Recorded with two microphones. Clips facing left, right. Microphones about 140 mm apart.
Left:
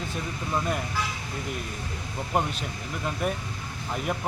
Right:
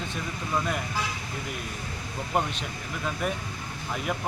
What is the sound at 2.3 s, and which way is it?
A man's voice, 5° left (ahead or behind).